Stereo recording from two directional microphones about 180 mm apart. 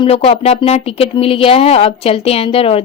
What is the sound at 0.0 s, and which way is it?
A woman's voice, 35° left (ahead or behind).